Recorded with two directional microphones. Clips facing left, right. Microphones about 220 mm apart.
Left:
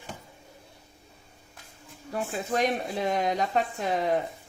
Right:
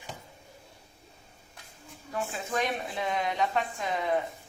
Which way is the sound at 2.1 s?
40° left (ahead or behind).